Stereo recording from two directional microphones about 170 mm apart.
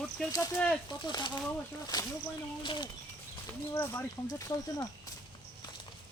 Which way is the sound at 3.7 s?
10° left (ahead or behind).